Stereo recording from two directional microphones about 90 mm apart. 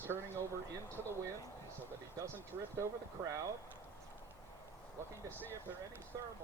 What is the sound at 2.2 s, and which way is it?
Speech, 35° right (ahead or behind).